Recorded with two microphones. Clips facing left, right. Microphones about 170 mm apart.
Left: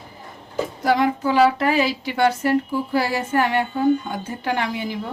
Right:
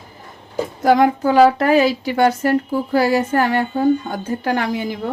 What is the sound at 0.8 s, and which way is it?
A woman's voice, 50° right (ahead or behind).